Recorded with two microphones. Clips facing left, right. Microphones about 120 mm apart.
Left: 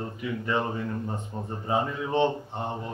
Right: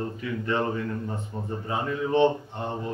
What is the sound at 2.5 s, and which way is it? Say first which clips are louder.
Mantra: even; 20° left (ahead or behind).